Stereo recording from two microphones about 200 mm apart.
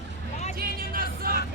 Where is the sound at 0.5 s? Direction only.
50° right (ahead or behind).